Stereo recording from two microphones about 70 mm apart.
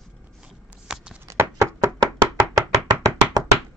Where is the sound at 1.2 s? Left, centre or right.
Right.